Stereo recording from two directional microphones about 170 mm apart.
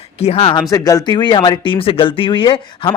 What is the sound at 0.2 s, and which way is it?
Speech, 35° left (ahead or behind).